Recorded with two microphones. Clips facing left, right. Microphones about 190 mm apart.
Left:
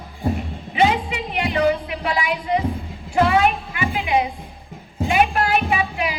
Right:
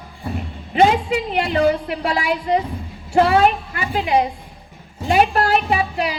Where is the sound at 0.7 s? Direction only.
45° right (ahead or behind).